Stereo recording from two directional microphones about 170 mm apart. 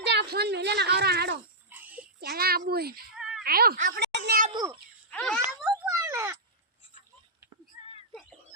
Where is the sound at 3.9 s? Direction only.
80° right.